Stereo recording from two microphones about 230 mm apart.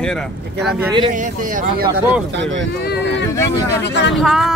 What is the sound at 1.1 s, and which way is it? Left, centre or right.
Speech, right.